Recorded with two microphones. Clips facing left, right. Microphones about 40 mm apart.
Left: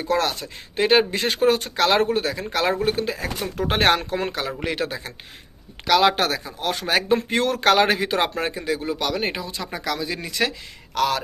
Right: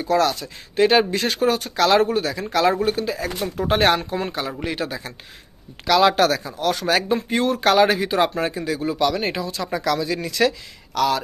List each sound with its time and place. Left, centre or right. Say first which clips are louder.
0.0 s speech: right 3 dB; left
5.9 s speech: right 2 dB; left
7.1 s speech: even; left
8.5 s speech: right 1 dB; left
11.0 s speech: right 2 dB; left